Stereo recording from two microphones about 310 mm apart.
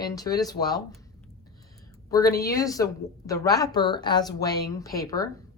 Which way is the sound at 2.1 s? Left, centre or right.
Centre.